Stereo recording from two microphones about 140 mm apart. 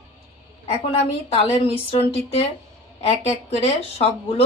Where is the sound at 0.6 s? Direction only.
45° left (ahead or behind).